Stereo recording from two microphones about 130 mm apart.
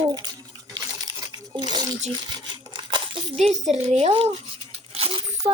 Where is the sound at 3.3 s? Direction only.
60° right (ahead or behind).